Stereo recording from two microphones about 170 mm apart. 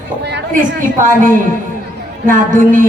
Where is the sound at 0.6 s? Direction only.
50° right (ahead or behind).